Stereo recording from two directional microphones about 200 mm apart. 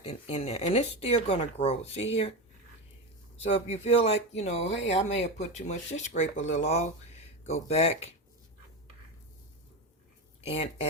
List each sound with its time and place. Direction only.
0.1 s speech: 30° left (ahead or behind)
3.5 s speech: 30° left (ahead or behind)
10.4 s speech: 30° left (ahead or behind)